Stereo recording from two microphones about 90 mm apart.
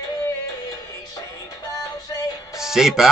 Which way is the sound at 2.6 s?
5° right (ahead or behind).